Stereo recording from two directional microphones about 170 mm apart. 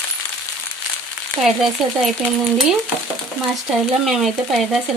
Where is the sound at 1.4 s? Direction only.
Centre (ahead or behind).